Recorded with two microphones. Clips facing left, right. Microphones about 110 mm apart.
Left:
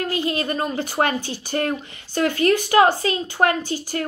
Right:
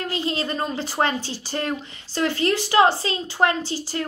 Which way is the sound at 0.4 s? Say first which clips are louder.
Left 2 dB; 50° left (ahead or behind).